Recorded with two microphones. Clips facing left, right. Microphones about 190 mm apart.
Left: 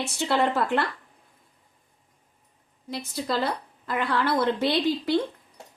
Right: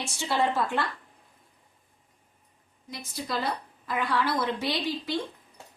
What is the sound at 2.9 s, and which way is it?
A woman's voice, 60° left (ahead or behind).